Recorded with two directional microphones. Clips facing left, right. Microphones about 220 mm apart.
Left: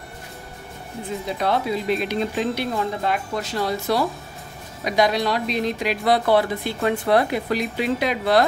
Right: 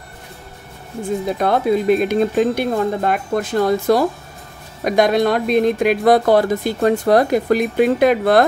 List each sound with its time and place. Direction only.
1.0 s speech: 50° right (ahead or behind)